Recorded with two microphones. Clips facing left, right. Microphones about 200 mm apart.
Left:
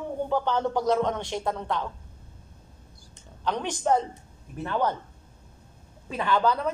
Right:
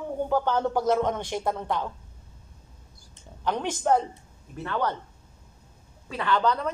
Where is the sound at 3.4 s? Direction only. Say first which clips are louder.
Right 1 dB; 10° right (ahead or behind).